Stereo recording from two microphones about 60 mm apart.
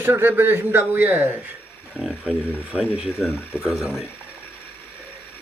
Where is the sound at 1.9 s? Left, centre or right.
Centre.